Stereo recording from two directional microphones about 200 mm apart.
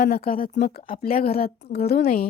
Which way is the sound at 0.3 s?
45° left (ahead or behind).